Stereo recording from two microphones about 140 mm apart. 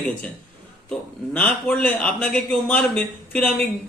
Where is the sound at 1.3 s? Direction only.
10° left (ahead or behind).